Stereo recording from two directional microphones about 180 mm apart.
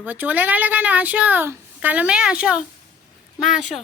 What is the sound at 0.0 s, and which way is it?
A woman's voice, 10° right (ahead or behind).